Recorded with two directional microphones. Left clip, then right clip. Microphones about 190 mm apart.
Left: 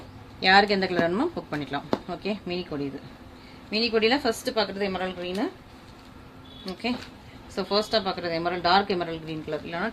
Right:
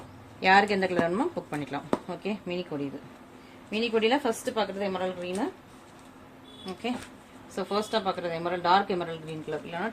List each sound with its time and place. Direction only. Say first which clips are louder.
0.3 s a woman's voice: left 2 dB; 20° left (ahead or behind)
3.7 s a woman's voice: left 2 dB; 25° left (ahead or behind)
7.5 s a woman's voice: left 4 dB; 25° left (ahead or behind)